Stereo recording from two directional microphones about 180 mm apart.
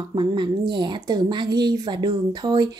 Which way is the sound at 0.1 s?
25° right (ahead or behind).